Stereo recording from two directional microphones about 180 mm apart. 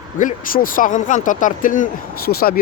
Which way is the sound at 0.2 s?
50° left (ahead or behind).